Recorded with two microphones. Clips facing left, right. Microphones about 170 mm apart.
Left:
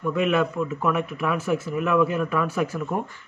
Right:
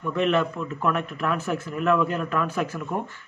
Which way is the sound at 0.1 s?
10° left (ahead or behind).